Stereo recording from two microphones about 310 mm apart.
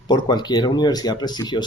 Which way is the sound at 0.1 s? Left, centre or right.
Centre.